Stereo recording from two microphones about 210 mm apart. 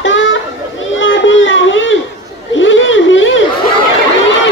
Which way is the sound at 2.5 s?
65° left (ahead or behind).